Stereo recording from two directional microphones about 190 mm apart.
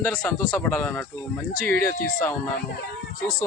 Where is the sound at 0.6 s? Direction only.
5° left (ahead or behind).